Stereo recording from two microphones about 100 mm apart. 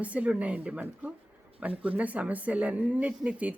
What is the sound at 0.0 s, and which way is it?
Speech, 15° right (ahead or behind).